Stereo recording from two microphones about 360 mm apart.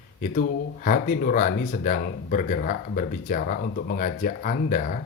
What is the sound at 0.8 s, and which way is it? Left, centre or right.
Speech, left.